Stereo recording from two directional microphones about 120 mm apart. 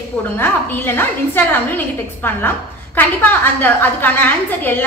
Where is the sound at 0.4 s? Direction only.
15° left (ahead or behind).